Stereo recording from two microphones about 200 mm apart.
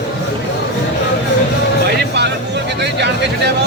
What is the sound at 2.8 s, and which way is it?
Speech, 55° right (ahead or behind).